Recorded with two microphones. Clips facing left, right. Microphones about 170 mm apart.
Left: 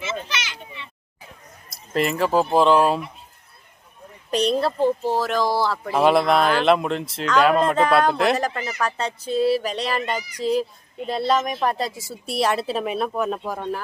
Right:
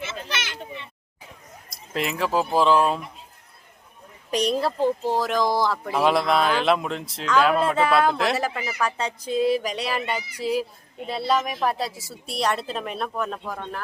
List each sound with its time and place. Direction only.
0.0 s children playing: 55° right (ahead or behind)
1.9 s speech: centre (ahead or behind)
4.3 s speech: 10° right (ahead or behind)
6.0 s speech: centre (ahead or behind)